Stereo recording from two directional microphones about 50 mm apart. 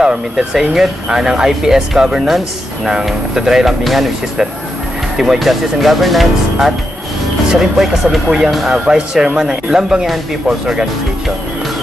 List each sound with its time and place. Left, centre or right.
0.0 s speech: centre